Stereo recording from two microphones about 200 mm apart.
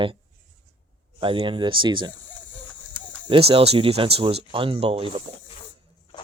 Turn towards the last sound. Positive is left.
turn(degrees=-30)  # may be behind; listen again after turning